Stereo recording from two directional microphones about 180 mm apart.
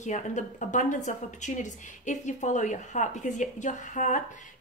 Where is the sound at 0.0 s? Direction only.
40° left (ahead or behind).